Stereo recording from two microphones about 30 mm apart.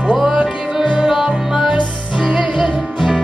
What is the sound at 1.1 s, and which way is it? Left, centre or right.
Music, centre.